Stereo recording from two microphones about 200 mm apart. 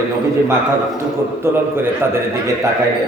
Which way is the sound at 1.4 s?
10° right (ahead or behind).